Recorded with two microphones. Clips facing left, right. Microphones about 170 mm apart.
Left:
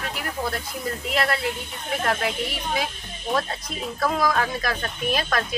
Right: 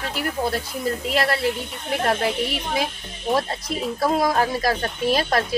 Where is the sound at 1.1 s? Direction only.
35° right (ahead or behind).